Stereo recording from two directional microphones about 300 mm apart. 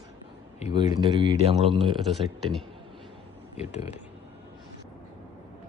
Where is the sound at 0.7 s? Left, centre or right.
Centre.